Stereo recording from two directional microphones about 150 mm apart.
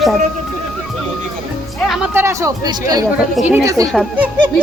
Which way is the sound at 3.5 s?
20° right (ahead or behind).